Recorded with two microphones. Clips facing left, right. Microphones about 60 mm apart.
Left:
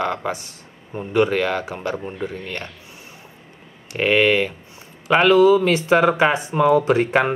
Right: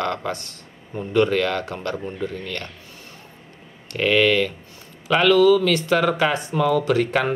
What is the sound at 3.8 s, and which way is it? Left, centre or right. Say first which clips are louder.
Speech: left 1 dB; centre.